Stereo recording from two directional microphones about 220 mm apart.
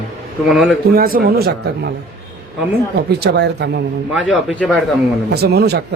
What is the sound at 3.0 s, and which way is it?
Speech, 50° right (ahead or behind).